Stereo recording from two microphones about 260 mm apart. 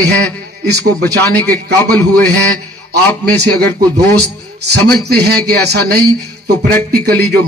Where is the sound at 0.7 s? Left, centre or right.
Right.